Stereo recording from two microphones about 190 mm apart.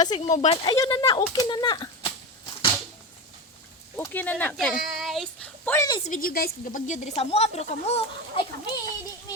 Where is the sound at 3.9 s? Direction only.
10° left (ahead or behind).